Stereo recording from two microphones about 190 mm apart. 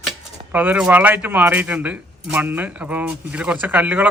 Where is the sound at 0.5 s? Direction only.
10° right (ahead or behind).